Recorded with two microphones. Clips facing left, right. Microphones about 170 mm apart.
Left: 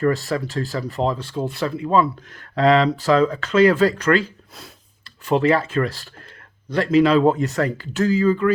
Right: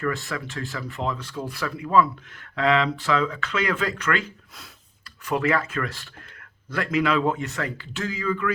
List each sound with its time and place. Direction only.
0.0 s speech: 35° left (ahead or behind)
2.6 s speech: 40° left (ahead or behind)